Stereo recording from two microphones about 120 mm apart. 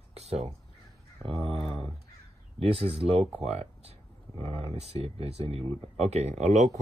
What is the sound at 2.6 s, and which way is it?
Speech, 55° right (ahead or behind).